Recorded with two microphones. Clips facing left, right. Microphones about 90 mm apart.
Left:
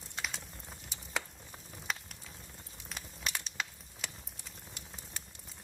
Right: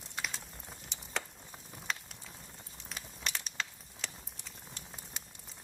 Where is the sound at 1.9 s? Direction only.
5° left (ahead or behind).